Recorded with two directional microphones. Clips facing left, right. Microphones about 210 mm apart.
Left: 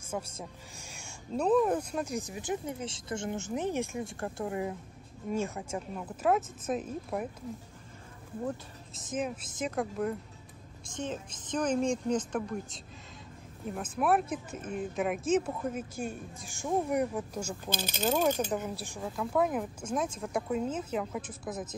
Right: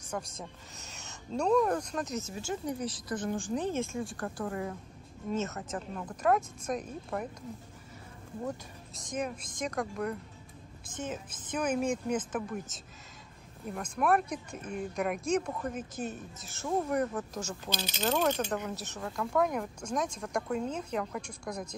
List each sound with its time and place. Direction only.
0.1 s speech: 10° left (ahead or behind)
9.1 s speech: 5° left (ahead or behind)
11.0 s speech: 5° right (ahead or behind); by 17.6 s 10° left (ahead or behind)
17.6 s speech: 50° left (ahead or behind)
18.0 s speech: 5° left (ahead or behind)